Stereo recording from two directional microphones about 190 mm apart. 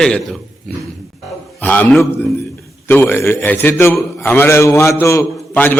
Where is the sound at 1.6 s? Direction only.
5° left (ahead or behind).